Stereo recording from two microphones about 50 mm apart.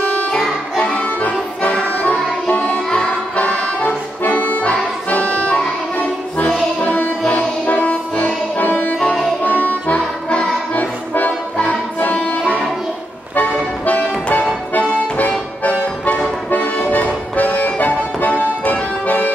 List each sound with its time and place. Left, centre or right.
0.0 s music: left
0.7 s music: centre
1.2 s accordion: left
2.0 s music: left
4.2 s accordion: left
5.1 s music: left
6.8 s music: left
13.8 s music: left
16.4 s accordion: left